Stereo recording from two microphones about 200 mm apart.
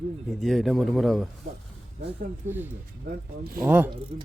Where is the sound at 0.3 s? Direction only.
Centre (ahead or behind).